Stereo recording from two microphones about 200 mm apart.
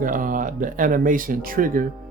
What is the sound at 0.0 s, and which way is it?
Speech, 40° right (ahead or behind).